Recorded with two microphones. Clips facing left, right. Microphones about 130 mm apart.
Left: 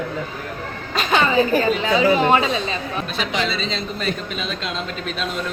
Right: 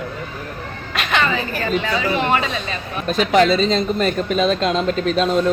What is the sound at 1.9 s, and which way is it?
Speech, 35° left (ahead or behind).